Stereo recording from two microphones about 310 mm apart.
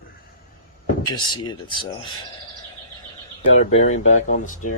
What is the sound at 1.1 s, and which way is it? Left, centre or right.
Speech, centre.